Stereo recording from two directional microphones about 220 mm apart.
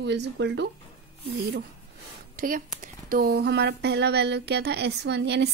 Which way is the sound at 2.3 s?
40° right (ahead or behind).